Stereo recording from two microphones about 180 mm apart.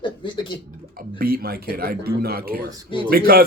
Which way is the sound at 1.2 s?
55° right (ahead or behind).